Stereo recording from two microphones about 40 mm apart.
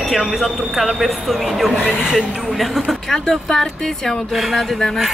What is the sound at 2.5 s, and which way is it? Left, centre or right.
Speech, centre.